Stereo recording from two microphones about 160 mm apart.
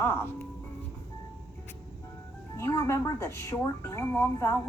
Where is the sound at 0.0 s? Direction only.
15° left (ahead or behind).